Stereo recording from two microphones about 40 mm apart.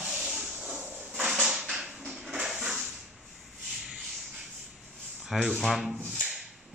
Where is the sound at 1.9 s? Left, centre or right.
Right.